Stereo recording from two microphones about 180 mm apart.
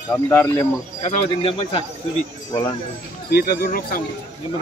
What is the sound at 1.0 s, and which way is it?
Speech, 35° left (ahead or behind).